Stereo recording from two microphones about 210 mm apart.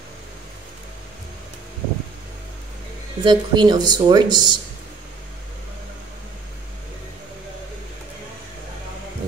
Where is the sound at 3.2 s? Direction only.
20° right (ahead or behind).